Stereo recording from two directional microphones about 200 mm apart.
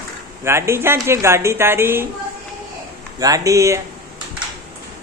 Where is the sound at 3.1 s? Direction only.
15° right (ahead or behind).